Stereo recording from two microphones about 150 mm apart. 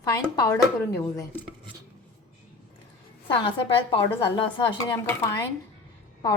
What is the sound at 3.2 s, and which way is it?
Speech, 30° left (ahead or behind).